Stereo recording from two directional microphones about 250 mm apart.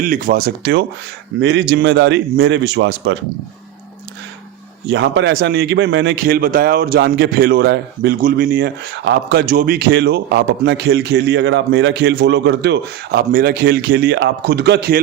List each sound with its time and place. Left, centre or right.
0.0 s a man's voice: right
4.9 s a man's voice: right